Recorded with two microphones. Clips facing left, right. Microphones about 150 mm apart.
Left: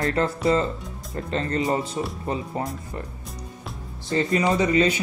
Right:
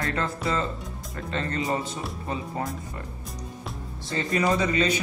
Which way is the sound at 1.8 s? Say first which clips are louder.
Left 5 dB; centre (ahead or behind).